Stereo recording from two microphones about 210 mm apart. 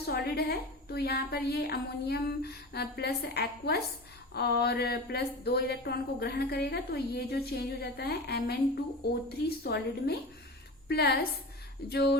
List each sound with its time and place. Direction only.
0.1 s a woman's voice: 50° left (ahead or behind)